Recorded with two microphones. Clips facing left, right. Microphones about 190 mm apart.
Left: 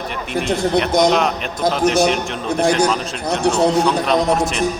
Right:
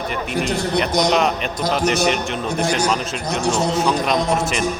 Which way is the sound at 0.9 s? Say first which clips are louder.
Left 5 dB; 55° left (ahead or behind).